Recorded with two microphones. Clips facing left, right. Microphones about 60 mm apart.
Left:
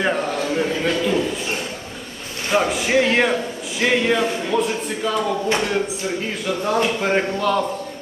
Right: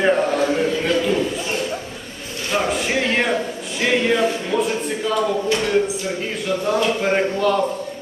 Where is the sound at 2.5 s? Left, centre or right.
Centre.